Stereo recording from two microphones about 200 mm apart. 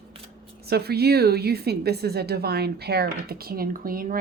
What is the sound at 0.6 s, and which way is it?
A woman's voice, 55° right (ahead or behind).